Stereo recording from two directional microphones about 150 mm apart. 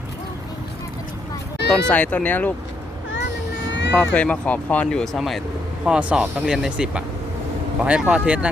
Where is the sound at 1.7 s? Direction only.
10° left (ahead or behind).